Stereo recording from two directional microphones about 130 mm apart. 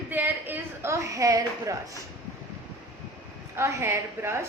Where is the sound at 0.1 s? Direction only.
15° right (ahead or behind).